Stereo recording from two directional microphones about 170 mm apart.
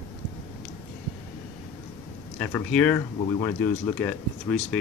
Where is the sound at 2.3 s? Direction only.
10° left (ahead or behind).